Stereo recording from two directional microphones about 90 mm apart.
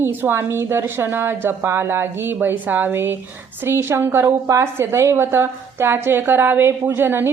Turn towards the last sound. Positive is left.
turn(degrees=-25)  # may be behind; listen again after turning